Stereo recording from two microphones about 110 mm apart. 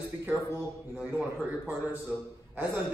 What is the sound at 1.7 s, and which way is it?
A man's voice, 15° right (ahead or behind).